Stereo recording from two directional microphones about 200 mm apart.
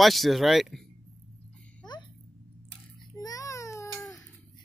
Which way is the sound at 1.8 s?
20° left (ahead or behind).